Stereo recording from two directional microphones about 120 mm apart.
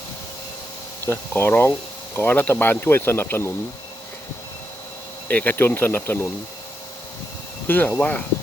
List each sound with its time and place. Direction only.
1.0 s speech: 20° left (ahead or behind)
5.3 s speech: 15° left (ahead or behind)
7.7 s speech: 15° left (ahead or behind)